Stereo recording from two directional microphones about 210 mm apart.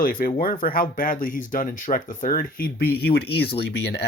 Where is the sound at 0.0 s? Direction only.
40° left (ahead or behind).